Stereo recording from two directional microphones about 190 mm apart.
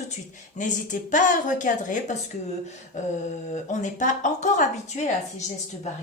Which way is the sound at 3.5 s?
40° left (ahead or behind).